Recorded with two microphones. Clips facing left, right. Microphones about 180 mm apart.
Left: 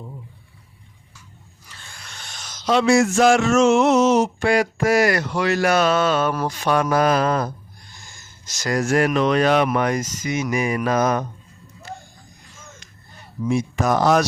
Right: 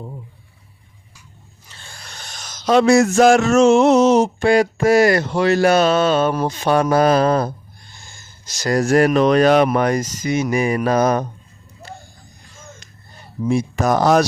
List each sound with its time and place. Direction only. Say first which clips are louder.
1.7 s speech: right 2 dB; 30° right (ahead or behind)
13.4 s speech: right 3 dB; 35° right (ahead or behind)